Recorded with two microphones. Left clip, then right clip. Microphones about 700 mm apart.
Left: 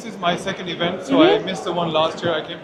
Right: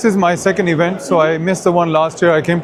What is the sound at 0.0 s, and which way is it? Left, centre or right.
Speech, right.